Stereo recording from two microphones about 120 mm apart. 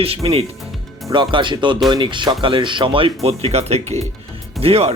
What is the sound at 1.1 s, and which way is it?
Speech, 40° right (ahead or behind).